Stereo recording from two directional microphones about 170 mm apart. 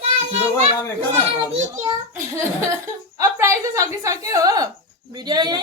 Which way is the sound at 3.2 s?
15° right (ahead or behind).